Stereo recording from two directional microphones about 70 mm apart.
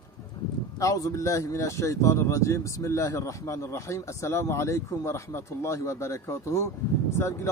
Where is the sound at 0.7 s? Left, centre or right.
Left.